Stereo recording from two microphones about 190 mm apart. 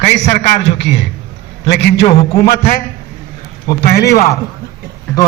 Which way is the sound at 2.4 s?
55° left (ahead or behind).